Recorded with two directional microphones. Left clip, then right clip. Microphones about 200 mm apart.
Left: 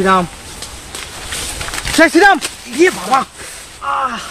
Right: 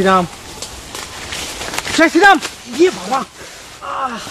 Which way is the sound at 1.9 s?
45° left (ahead or behind).